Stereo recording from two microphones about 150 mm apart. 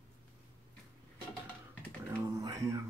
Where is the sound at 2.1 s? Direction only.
20° right (ahead or behind).